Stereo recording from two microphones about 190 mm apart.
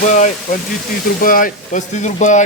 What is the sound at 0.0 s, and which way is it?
Speech, 40° left (ahead or behind).